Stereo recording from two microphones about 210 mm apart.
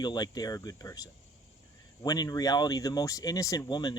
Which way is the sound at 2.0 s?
15° left (ahead or behind).